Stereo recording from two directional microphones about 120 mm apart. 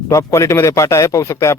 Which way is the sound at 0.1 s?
25° left (ahead or behind).